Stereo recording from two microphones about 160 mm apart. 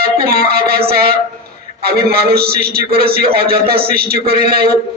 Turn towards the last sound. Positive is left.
turn(degrees=-75)  # may be behind; listen again after turning